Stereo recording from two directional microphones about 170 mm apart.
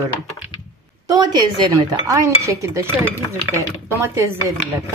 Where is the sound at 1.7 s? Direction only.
20° right (ahead or behind).